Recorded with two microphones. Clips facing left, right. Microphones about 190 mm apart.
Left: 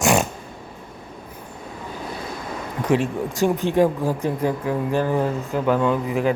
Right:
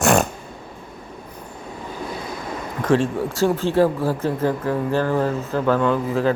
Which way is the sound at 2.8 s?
10° left (ahead or behind).